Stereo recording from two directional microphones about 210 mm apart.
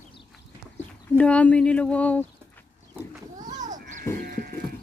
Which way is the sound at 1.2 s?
5° left (ahead or behind).